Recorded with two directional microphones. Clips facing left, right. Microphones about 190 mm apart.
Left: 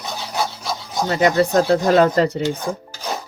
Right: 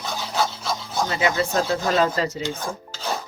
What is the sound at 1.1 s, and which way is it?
Speech, 45° left (ahead or behind).